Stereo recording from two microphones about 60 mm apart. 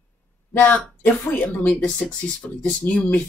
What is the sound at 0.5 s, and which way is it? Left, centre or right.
Speech, left.